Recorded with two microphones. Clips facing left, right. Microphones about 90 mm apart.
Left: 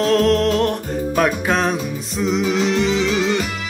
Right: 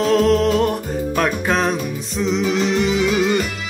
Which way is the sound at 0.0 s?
Centre (ahead or behind).